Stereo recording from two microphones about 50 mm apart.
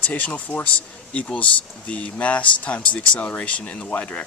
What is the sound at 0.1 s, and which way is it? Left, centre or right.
Speech, left.